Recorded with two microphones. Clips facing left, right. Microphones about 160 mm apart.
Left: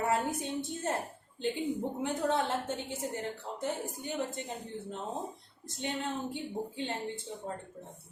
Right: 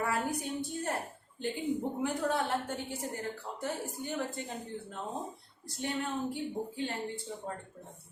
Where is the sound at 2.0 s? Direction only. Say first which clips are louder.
Left 1 dB; 20° left (ahead or behind).